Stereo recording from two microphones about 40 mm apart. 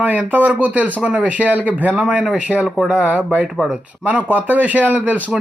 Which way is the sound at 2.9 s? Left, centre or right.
Right.